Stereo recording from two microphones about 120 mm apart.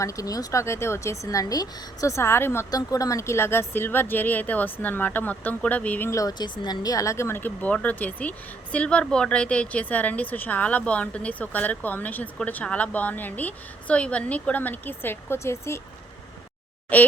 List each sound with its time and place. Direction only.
0.0 s a woman's voice: 25° left (ahead or behind)
6.1 s speech: 30° left (ahead or behind)
16.9 s speech: 15° left (ahead or behind)